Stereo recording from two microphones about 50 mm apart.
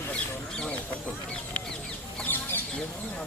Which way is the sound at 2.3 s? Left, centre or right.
Left.